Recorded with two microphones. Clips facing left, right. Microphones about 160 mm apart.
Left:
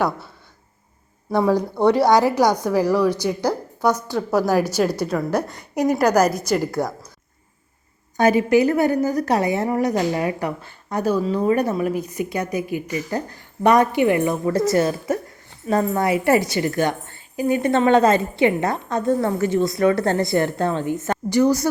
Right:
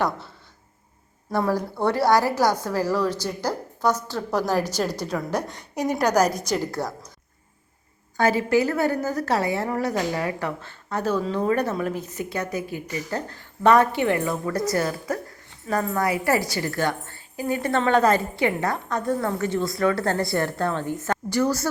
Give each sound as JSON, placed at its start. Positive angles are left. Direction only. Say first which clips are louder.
{"t": 1.3, "sound": "a woman's voice", "louder": "left 5 dB", "side_deg": 15}
{"t": 8.1, "sound": "a woman's voice", "louder": "left 4 dB", "side_deg": 20}